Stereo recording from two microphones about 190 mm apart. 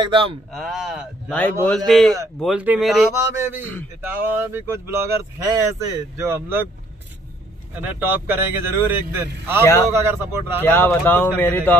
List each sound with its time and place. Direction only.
0.0 s speech: 30° right (ahead or behind)
0.6 s speech: centre (ahead or behind)
4.0 s speech: 10° right (ahead or behind)
7.7 s speech: 10° right (ahead or behind)
10.6 s speech: 10° left (ahead or behind)